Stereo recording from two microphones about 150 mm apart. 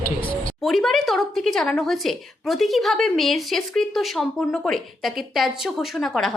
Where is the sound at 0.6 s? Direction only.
Centre (ahead or behind).